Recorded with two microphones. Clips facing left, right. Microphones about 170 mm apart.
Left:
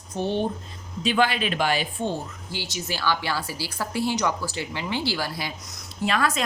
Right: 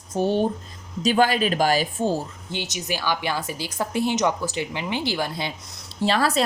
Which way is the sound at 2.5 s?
20° right (ahead or behind).